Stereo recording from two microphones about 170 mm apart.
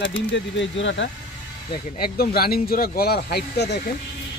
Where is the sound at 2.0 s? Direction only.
65° left (ahead or behind); by 3.9 s 80° left.